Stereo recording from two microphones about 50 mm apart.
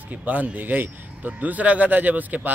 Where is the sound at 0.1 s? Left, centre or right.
Right.